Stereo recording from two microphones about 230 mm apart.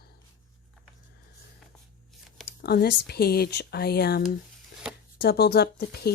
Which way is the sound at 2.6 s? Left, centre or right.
Left.